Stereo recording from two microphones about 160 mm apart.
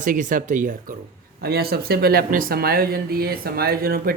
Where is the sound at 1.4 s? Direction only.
75° right (ahead or behind).